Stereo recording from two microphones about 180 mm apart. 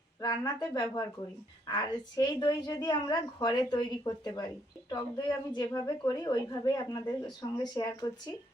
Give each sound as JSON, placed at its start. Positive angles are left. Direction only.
{"t": 0.2, "sound": "a woman's voice", "side_deg": 20}